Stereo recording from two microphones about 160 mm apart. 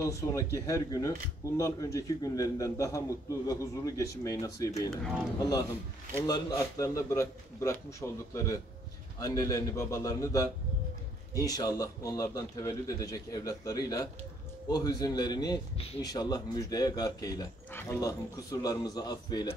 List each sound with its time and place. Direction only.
0.0 s speech: 20° left (ahead or behind)
4.9 s speech: centre (ahead or behind)
5.4 s speech: 25° left (ahead or behind)
17.6 s speech: 15° left (ahead or behind)